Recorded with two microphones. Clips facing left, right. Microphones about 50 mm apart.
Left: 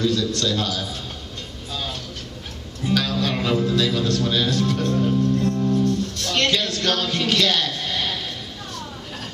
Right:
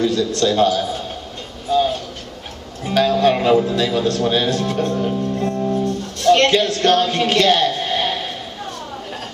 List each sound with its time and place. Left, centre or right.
0.0 s a man's voice: right
1.7 s music: right
2.8 s a man's voice: right
6.3 s a sound: right